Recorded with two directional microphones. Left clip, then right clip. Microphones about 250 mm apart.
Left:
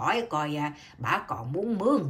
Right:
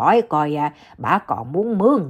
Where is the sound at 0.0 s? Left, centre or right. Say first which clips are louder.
Right 11 dB; centre.